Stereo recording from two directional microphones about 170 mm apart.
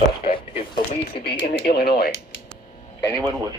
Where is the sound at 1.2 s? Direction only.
70° left (ahead or behind).